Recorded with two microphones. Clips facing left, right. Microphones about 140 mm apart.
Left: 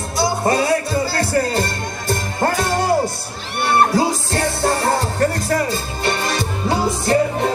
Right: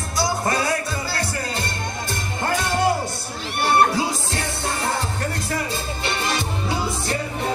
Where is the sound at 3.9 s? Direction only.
40° left (ahead or behind).